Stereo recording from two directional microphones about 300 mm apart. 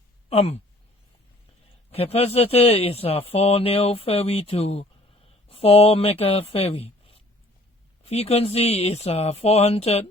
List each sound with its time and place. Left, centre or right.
0.3 s a man's voice: left
1.9 s a man's voice: centre